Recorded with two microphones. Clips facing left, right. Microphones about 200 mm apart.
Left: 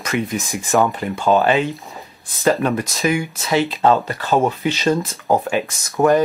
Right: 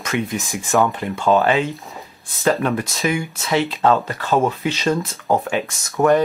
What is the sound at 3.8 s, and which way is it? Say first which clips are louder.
Speech: left 1 dB; 20° left (ahead or behind).